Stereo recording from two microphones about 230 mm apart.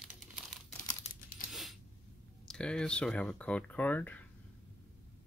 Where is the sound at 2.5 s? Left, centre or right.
Centre.